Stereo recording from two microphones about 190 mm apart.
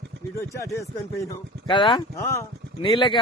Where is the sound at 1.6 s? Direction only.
25° left (ahead or behind).